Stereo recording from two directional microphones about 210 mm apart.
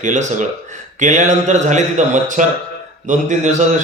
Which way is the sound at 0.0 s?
35° right (ahead or behind).